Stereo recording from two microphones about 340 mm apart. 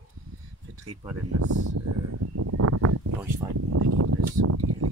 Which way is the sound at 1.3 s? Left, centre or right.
Right.